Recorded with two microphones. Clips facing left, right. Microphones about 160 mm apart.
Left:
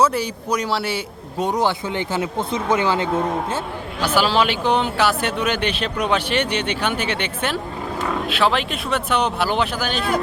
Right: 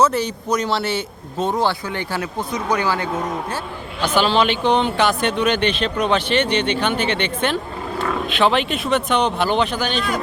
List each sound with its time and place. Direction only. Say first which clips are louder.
0.0 s a man's voice: right 1 dB; 10° left (ahead or behind)
4.0 s a man's voice: right 1 dB; 5° left (ahead or behind)